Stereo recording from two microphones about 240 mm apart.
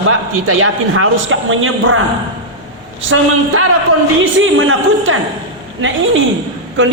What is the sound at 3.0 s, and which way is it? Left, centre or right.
A man's voice, right.